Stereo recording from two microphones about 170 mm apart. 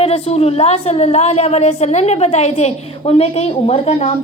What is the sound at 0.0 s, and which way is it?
A woman's voice, 35° left (ahead or behind).